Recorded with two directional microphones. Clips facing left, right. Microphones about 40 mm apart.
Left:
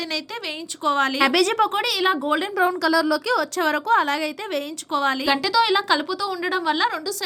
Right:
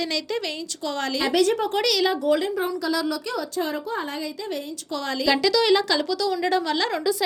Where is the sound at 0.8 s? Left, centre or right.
Left.